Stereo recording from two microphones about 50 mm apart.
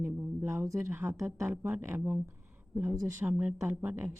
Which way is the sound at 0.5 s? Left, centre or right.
Right.